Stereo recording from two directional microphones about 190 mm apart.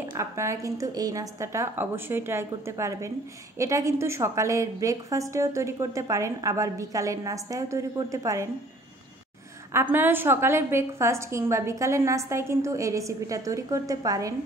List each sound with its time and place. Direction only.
0.1 s a woman's voice: 15° right (ahead or behind)
9.7 s a woman's voice: 10° right (ahead or behind)